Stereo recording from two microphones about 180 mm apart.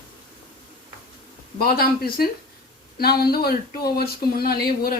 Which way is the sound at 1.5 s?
55° left (ahead or behind).